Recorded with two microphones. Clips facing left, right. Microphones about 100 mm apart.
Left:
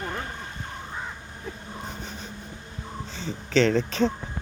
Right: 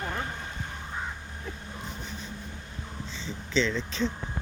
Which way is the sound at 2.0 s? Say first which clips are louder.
Left 1 dB; 70° left (ahead or behind).